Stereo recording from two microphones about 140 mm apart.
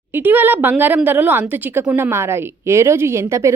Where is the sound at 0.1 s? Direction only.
15° right (ahead or behind).